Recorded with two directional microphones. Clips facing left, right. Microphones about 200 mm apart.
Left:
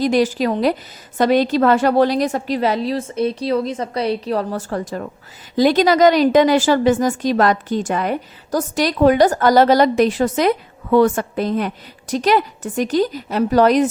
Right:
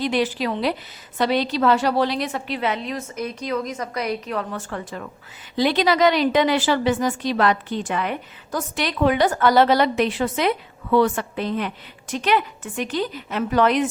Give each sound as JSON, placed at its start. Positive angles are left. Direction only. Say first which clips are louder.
{"t": 0.0, "sound": "a woman's voice", "louder": "left 6 dB", "side_deg": 40}